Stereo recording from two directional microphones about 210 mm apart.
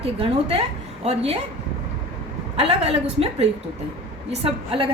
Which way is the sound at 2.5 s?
30° right (ahead or behind).